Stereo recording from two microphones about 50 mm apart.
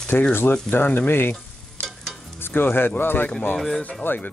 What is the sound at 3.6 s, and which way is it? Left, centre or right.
Speech, centre.